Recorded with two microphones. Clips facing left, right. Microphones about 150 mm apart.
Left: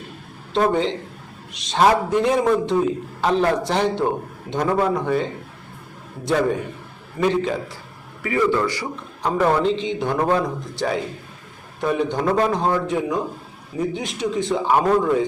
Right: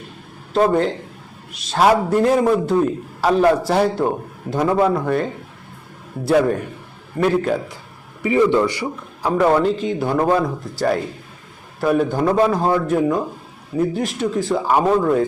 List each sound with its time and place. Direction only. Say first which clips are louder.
0.5 s a man's voice: right 3 dB; 5° right (ahead or behind)
7.2 s a man's voice: right 3 dB; 5° right (ahead or behind)
8.2 s a man's voice: right 4 dB; 20° right (ahead or behind)
9.2 s a man's voice: right 3 dB; 5° right (ahead or behind)